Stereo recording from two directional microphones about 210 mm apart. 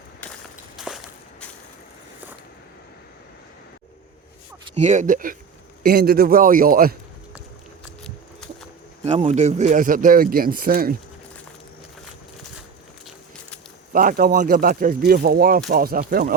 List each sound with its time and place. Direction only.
0.8 s a sound: centre (ahead or behind)
4.7 s speech: 35° right (ahead or behind)
9.0 s speech: 30° right (ahead or behind)
13.9 s speech: 40° right (ahead or behind)